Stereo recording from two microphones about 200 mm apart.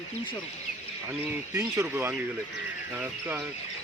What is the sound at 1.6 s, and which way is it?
A man's voice, 10° right (ahead or behind).